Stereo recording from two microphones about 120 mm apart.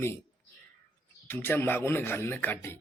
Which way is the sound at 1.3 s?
15° left (ahead or behind).